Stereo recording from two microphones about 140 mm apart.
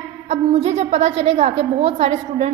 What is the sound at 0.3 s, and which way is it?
A woman's voice, 50° right (ahead or behind).